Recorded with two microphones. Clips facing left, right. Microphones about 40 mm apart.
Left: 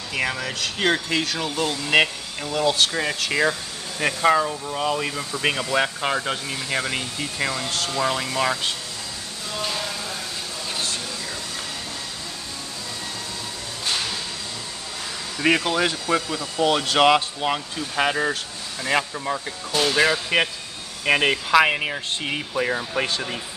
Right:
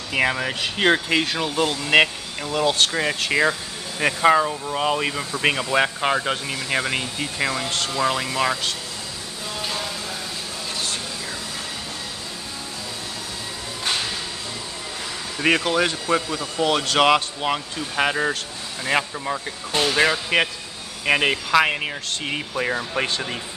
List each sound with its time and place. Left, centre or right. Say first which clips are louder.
0.1 s speech: right 4 dB; centre
9.6 s a sound: left 1 dB; centre
15.3 s speech: right 1 dB; centre